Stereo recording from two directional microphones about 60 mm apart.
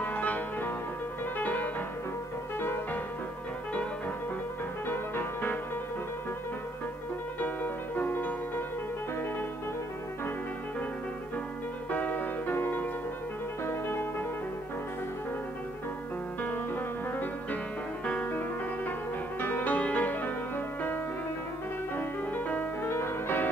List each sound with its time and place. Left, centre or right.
0.0 s music: left
4.8 s music: left
7.3 s music: left
11.9 s music: left
18.0 s music: centre
19.4 s music: left
22.8 s music: left